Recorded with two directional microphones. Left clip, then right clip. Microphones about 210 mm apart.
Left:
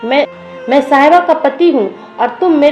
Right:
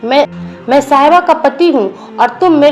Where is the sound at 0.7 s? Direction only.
30° right (ahead or behind).